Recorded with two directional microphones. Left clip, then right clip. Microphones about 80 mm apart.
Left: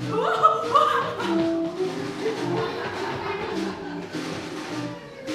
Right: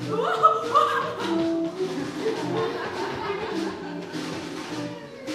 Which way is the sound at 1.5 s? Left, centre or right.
Right.